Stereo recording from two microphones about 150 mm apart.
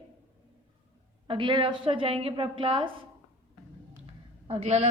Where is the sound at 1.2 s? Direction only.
35° right (ahead or behind).